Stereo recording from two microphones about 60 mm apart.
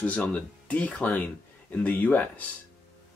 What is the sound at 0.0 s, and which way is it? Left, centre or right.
Speech, left.